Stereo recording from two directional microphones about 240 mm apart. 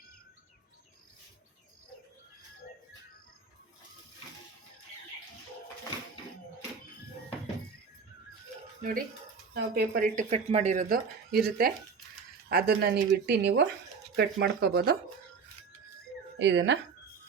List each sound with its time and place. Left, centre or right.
8.8 s speech: right
10.2 s speech: right
16.4 s speech: right